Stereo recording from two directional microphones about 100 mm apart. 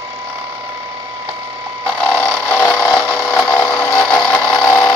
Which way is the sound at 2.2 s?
20° left (ahead or behind).